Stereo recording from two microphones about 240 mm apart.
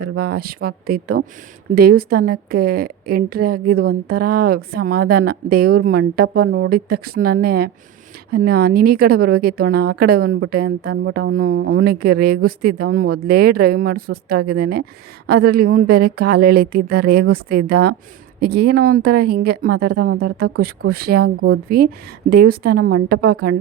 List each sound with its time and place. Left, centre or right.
0.0 s a woman's voice: right